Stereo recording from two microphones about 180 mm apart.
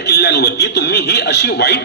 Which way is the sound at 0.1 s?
65° left (ahead or behind).